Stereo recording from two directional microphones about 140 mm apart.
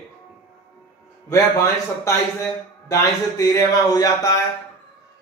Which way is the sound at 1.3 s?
20° left (ahead or behind).